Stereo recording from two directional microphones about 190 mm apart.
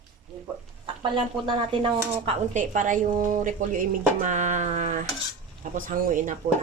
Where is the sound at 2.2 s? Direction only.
35° right (ahead or behind).